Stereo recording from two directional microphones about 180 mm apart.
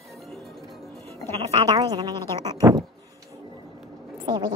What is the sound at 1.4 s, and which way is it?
Speech, 25° right (ahead or behind).